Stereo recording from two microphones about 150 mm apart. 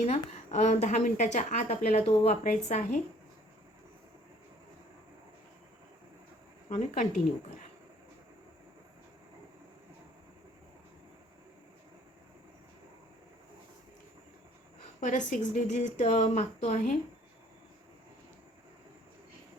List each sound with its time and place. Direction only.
0.0 s a woman's voice: 45° left (ahead or behind)
6.7 s a woman's voice: 50° left (ahead or behind)
15.0 s a woman's voice: 55° left (ahead or behind)